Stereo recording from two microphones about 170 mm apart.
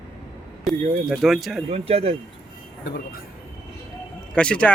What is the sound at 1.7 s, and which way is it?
Speech, 35° right (ahead or behind).